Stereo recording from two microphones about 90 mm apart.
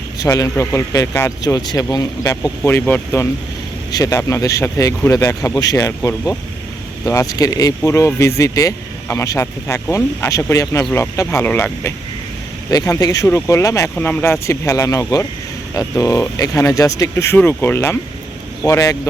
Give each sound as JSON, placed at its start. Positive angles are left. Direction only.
{"t": 0.2, "sound": "speech", "side_deg": 40}
{"t": 1.5, "sound": "speech", "side_deg": 45}
{"t": 2.3, "sound": "speech", "side_deg": 30}
{"t": 3.9, "sound": "speech", "side_deg": 40}
{"t": 7.9, "sound": "speech", "side_deg": 30}
{"t": 11.4, "sound": "speech", "side_deg": 25}
{"t": 12.7, "sound": "speech", "side_deg": 45}
{"t": 13.2, "sound": "speech", "side_deg": 30}
{"t": 13.9, "sound": "speech", "side_deg": 20}
{"t": 18.6, "sound": "speech", "side_deg": 40}